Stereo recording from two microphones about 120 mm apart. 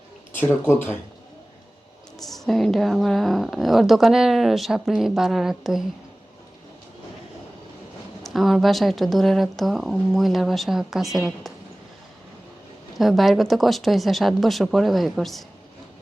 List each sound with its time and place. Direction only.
0.3 s speech: 20° left (ahead or behind)
2.2 s a woman's voice: centre (ahead or behind)
8.2 s a woman's voice: centre (ahead or behind)
13.0 s a woman's voice: centre (ahead or behind)